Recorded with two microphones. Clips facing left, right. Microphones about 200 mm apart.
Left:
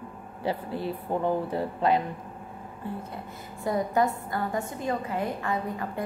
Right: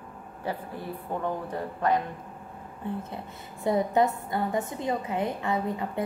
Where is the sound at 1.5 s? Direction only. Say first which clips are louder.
Left 2 dB; 15° left (ahead or behind).